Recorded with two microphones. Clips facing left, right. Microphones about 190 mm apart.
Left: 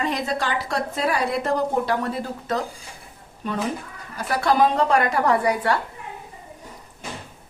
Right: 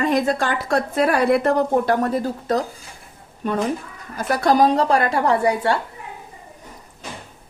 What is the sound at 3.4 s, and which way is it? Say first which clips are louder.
Speech: right 5 dB; 50° right (ahead or behind).